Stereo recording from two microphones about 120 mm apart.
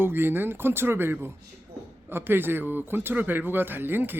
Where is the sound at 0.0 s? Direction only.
20° right (ahead or behind).